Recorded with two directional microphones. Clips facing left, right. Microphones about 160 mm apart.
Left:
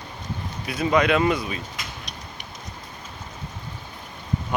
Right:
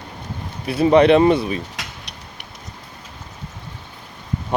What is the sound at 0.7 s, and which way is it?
Speech, 30° right (ahead or behind).